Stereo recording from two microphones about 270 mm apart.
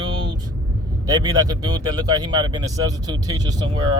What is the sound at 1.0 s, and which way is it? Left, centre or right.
Speech, centre.